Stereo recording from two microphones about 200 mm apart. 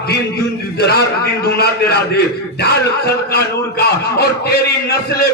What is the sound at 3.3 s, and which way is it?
A man's voice, 50° left (ahead or behind).